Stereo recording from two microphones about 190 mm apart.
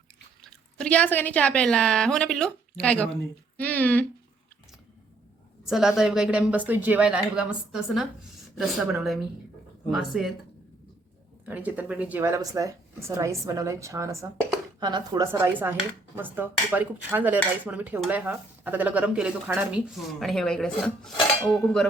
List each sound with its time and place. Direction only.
0.4 s speech: 5° left (ahead or behind)
5.6 s speech: centre (ahead or behind)
11.4 s dishes: 10° right (ahead or behind)
21.5 s speech: 5° left (ahead or behind)